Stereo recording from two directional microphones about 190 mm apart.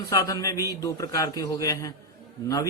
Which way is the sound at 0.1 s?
20° left (ahead or behind).